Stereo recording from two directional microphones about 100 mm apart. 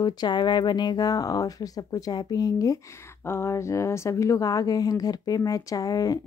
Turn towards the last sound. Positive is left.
turn(degrees=40)  # may be behind; listen again after turning